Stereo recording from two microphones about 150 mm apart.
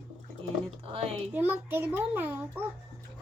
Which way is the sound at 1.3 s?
10° right (ahead or behind).